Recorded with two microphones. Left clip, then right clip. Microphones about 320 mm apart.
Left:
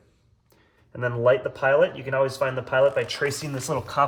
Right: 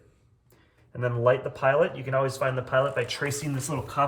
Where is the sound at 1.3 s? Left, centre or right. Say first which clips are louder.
Left 3 dB; centre.